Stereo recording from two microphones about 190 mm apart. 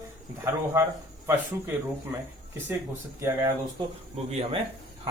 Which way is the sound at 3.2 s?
15° right (ahead or behind).